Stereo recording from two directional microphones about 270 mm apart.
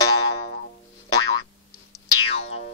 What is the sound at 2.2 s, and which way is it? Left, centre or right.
Music, left.